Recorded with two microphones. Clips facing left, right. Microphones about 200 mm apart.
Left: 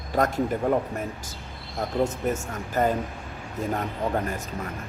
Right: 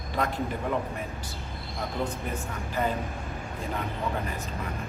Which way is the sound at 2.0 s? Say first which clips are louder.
Left 6 dB; 45° left (ahead or behind).